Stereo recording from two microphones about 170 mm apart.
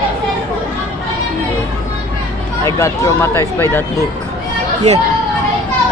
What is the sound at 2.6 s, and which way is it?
Speech, 15° left (ahead or behind).